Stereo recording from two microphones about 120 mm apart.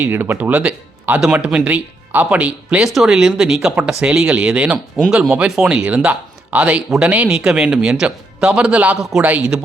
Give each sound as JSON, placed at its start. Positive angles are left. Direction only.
{"t": 0.0, "sound": "speech", "side_deg": -20}